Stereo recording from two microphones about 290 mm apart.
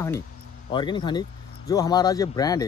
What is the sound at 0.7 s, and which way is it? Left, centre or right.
Speech, centre.